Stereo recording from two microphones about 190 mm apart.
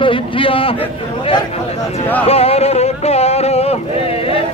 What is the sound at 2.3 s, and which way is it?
Speech, 30° left (ahead or behind).